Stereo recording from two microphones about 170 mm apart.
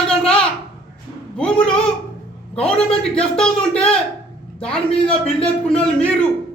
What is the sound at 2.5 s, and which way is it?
A man's voice, 5° left (ahead or behind).